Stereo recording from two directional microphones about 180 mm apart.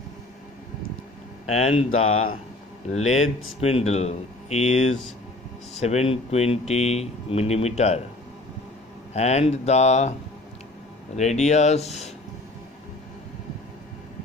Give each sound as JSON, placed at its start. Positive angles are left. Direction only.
{"t": 1.4, "sound": "speech", "side_deg": 35}
{"t": 9.1, "sound": "speech", "side_deg": 40}
{"t": 11.1, "sound": "speech", "side_deg": 40}